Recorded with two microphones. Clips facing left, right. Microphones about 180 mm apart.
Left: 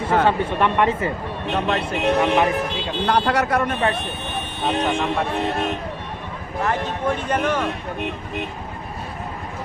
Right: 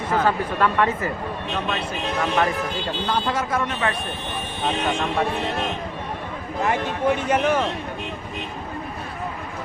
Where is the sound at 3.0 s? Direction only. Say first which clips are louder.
Left 6 dB; 70° left (ahead or behind).